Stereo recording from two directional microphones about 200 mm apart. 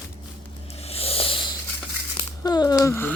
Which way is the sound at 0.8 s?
30° left (ahead or behind).